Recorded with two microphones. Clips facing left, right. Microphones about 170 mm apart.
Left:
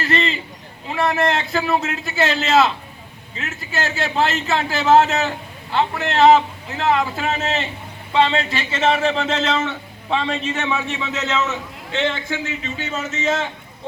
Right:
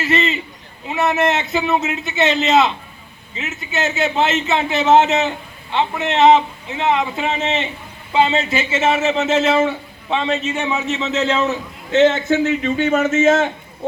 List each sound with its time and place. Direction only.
0.0 s a sound: 5° right (ahead or behind)
0.9 s a man's voice: 5° right (ahead or behind)
10.9 s a man's voice: 25° right (ahead or behind)
12.3 s a man's voice: 50° right (ahead or behind)